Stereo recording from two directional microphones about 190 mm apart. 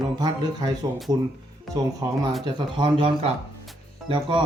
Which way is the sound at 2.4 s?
25° right (ahead or behind).